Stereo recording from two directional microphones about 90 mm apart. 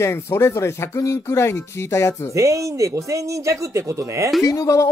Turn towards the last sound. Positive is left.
turn(degrees=35)  # may be behind; listen again after turning